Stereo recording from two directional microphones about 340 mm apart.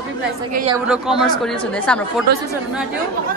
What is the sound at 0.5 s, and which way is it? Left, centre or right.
Speech, right.